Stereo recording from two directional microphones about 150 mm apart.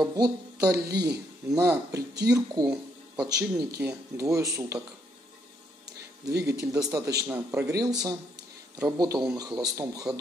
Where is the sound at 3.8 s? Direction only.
10° right (ahead or behind).